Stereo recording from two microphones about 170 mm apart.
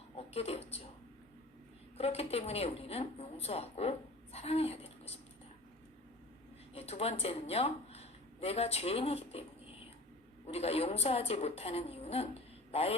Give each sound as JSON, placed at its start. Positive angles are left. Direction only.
{"t": 0.2, "sound": "speech", "side_deg": 35}
{"t": 2.0, "sound": "a woman's voice", "side_deg": 35}
{"t": 6.7, "sound": "a woman's voice", "side_deg": 35}